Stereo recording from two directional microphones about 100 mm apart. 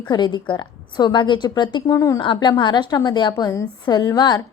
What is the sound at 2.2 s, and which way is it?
A woman's voice, 55° left (ahead or behind).